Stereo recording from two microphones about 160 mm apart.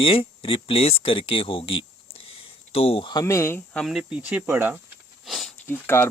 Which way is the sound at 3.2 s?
15° left (ahead or behind).